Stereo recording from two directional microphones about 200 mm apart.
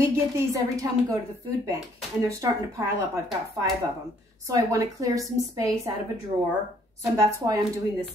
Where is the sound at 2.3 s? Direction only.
15° right (ahead or behind).